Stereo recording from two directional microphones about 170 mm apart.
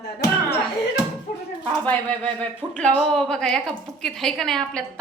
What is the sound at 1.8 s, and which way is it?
A woman's voice, 10° left (ahead or behind).